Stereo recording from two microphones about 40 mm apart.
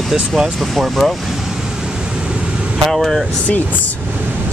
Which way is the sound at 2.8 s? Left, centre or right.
Centre.